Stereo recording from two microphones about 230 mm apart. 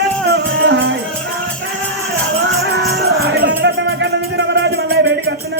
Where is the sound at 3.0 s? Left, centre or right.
Right.